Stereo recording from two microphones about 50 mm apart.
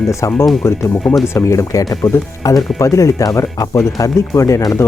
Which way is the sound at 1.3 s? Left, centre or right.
Left.